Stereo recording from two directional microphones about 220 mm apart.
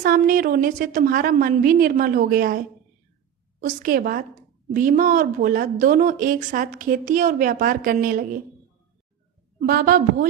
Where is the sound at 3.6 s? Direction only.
40° right (ahead or behind).